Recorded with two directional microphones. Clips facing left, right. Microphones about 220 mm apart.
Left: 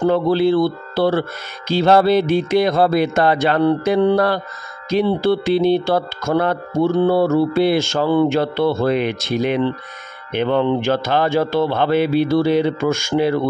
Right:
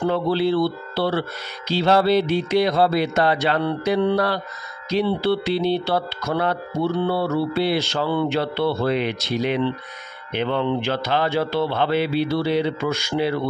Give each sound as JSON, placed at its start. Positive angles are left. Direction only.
{"t": 0.0, "sound": "speech", "side_deg": 50}